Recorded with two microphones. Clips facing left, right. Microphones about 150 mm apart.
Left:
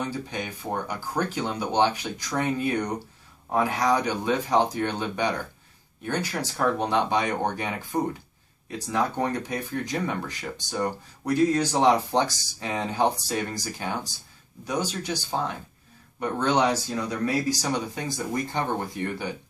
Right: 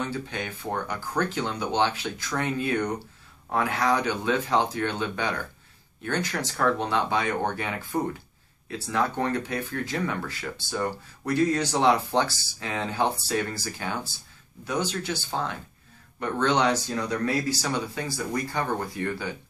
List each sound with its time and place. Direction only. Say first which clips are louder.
0.0 s speech: even; 10° left (ahead or behind)